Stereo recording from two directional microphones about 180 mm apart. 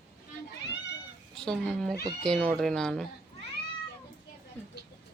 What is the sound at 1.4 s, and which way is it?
Speech, centre (ahead or behind).